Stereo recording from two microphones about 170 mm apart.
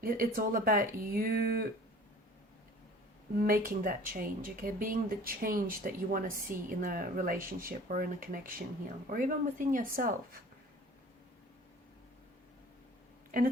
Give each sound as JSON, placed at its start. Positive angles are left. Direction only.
{"t": 0.0, "sound": "speech", "side_deg": -55}
{"t": 3.3, "sound": "a woman's voice", "side_deg": -55}